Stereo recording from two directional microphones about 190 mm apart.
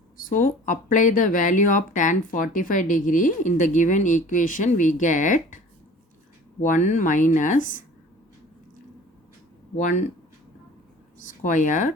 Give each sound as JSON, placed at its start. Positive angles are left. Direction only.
{"t": 0.2, "sound": "speech", "side_deg": 45}
{"t": 6.6, "sound": "speech", "side_deg": 40}
{"t": 9.7, "sound": "speech", "side_deg": 40}
{"t": 11.4, "sound": "speech", "side_deg": 40}